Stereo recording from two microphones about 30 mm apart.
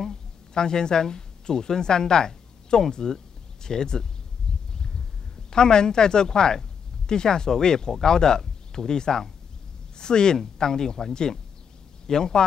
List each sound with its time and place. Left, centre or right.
0.1 s a woman's voice: left
4.7 s a sound: left
5.5 s speech: left